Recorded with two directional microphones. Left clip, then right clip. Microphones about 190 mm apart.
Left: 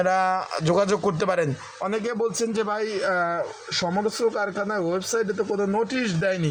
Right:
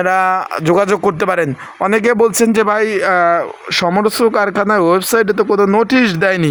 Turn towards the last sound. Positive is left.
turn(degrees=-55)  # may be behind; listen again after turning